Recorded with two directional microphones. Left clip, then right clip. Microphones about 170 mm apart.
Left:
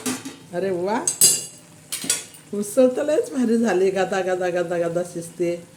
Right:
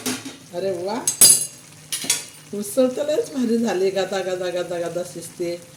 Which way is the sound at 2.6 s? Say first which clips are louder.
Left 2 dB; 10° left (ahead or behind).